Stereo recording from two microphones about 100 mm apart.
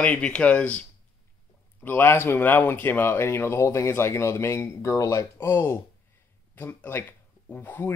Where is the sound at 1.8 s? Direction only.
25° left (ahead or behind).